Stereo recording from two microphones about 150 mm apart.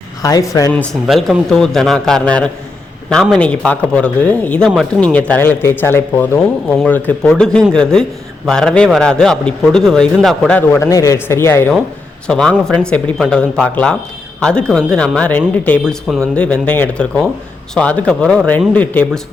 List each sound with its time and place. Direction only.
0.2 s speech: 25° left (ahead or behind)
1.0 s a man's voice: centre (ahead or behind)
10.8 s speech: 20° left (ahead or behind)
12.3 s a man's voice: 5° left (ahead or behind)